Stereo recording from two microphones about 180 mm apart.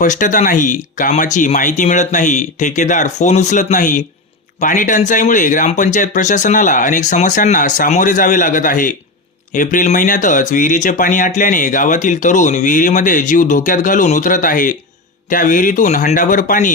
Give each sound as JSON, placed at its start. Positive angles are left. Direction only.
{"t": 0.0, "sound": "speech", "side_deg": 45}